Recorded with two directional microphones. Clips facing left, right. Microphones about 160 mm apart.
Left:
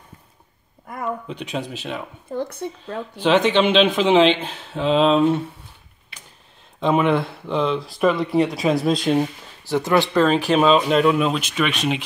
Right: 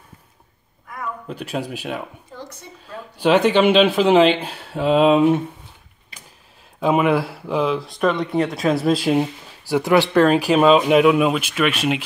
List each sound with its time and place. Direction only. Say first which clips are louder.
1.2 s speech: right 1 dB; 5° right (ahead or behind)
2.3 s speech: left 14 dB; 60° left (ahead or behind)
3.2 s speech: right 2 dB; 10° right (ahead or behind)
6.8 s speech: right 1 dB; 5° right (ahead or behind)